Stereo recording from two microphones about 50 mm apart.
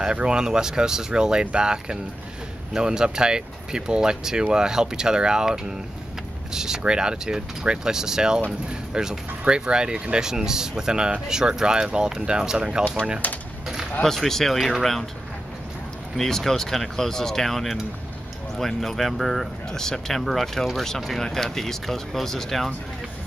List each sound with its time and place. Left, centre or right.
0.0 s speech: centre
13.2 s speech: left
14.0 s speech: centre
16.2 s speech: centre